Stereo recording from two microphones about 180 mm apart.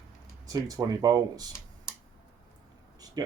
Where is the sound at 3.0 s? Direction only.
20° right (ahead or behind).